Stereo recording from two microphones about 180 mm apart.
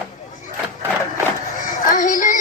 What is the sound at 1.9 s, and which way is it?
Child singing, 45° left (ahead or behind).